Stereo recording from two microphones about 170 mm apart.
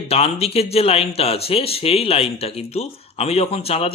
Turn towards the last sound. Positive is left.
turn(degrees=35)  # may be behind; listen again after turning